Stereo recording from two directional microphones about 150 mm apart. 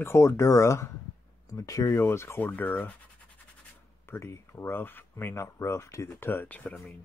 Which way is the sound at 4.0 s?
15° left (ahead or behind).